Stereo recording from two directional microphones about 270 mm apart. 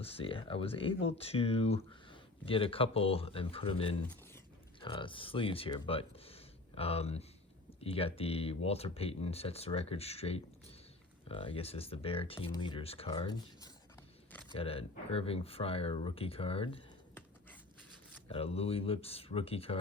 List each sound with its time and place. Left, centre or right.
0.0 s speech: left
18.3 s speech: left